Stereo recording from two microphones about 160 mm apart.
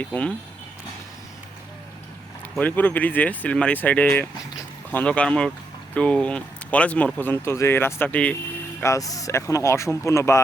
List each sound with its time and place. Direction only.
0.0 s speech: 10° left (ahead or behind)
2.6 s speech: 10° left (ahead or behind)
8.8 s speech: 20° left (ahead or behind)